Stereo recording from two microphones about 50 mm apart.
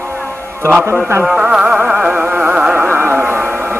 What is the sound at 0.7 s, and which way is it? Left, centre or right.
Speech, right.